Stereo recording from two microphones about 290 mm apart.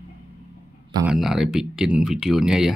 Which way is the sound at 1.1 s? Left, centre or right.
Centre.